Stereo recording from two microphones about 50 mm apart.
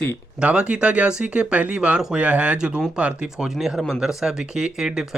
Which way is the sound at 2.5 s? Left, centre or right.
Centre.